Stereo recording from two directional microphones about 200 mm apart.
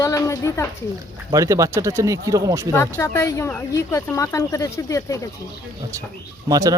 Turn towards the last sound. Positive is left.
turn(degrees=-20)  # may be behind; listen again after turning